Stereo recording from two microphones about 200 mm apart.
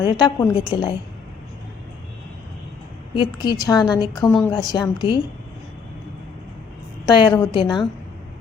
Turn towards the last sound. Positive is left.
turn(degrees=25)  # may be behind; listen again after turning